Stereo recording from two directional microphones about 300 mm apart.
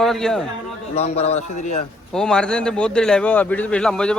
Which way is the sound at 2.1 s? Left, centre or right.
Centre.